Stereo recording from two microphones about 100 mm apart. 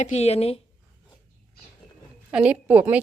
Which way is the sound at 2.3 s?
10° right (ahead or behind).